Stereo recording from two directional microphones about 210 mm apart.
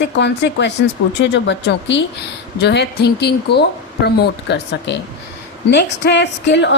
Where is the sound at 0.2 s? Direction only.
55° left (ahead or behind).